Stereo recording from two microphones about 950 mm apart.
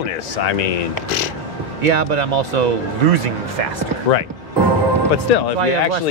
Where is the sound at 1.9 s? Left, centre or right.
Right.